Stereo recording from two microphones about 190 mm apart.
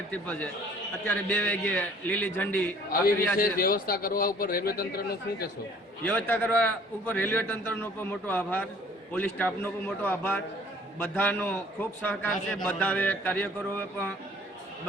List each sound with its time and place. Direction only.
0.1 s a man's voice: 10° left (ahead or behind)
3.3 s speech: 50° left (ahead or behind)
6.1 s a man's voice: 10° left (ahead or behind)